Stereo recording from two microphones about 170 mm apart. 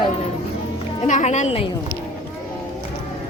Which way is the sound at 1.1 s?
45° left (ahead or behind).